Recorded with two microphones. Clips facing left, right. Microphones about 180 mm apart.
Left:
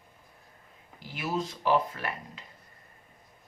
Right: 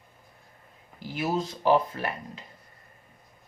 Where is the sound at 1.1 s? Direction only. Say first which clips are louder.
Right 4 dB; 35° right (ahead or behind).